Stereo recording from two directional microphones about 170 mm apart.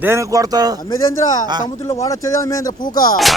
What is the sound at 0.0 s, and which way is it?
Speech, 15° right (ahead or behind).